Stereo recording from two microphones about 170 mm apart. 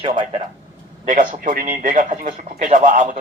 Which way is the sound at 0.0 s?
30° right (ahead or behind).